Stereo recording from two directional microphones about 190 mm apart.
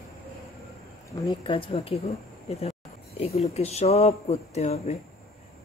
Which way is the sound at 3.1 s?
35° left (ahead or behind).